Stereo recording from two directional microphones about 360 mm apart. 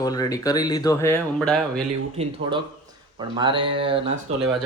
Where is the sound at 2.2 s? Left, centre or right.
Centre.